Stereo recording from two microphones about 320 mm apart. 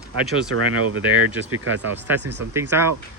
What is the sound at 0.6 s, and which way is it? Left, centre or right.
Speech, right.